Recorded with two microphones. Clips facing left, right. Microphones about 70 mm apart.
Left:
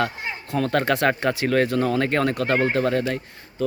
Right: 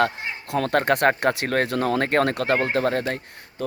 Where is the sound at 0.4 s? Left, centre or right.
Right.